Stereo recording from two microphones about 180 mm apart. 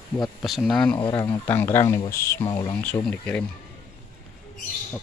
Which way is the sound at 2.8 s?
5° left (ahead or behind).